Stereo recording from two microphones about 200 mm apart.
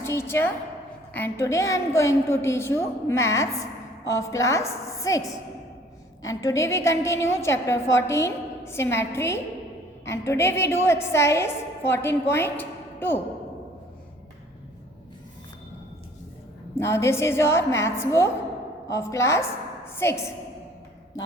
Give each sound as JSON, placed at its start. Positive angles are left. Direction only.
{"t": 0.0, "sound": "a sound", "side_deg": 15}
{"t": 1.1, "sound": "a woman's voice", "side_deg": 10}
{"t": 16.7, "sound": "a woman's voice", "side_deg": 15}